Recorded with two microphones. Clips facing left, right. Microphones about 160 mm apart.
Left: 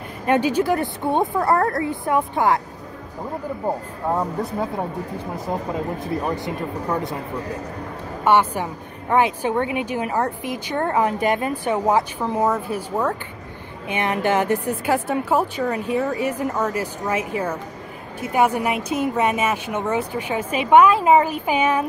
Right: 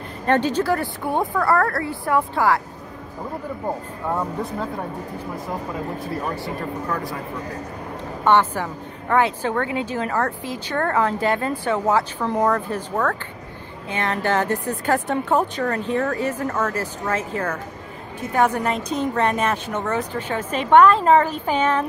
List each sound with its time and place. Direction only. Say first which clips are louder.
0.3 s a woman's voice: left 1 dB; 10° left (ahead or behind)
3.6 s a woman's voice: left 3 dB; 15° left (ahead or behind)
8.2 s a woman's voice: even; 10° left (ahead or behind)